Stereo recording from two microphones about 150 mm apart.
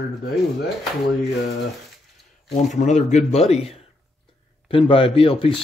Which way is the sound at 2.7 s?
50° left (ahead or behind).